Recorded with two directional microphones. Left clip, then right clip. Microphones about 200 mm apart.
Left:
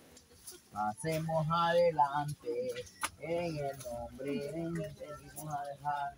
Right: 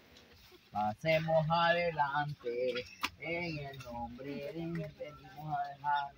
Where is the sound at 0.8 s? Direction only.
40° right (ahead or behind).